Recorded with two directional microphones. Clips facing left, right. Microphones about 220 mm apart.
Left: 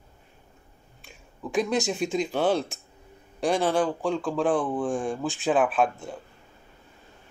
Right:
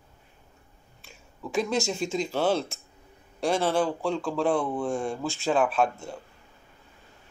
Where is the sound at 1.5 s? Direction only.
Centre (ahead or behind).